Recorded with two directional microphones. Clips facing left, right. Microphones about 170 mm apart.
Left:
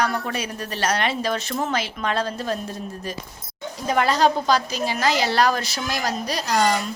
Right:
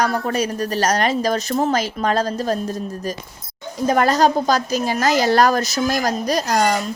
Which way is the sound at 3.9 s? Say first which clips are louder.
Right 3 dB; 45° right (ahead or behind).